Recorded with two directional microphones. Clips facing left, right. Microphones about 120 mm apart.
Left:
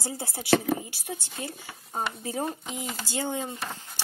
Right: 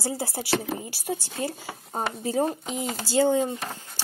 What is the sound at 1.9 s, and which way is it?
Speech, 35° right (ahead or behind).